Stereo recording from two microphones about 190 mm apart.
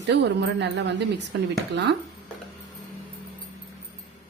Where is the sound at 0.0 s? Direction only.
65° right (ahead or behind).